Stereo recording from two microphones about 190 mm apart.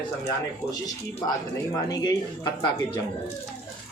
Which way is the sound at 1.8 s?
20° left (ahead or behind).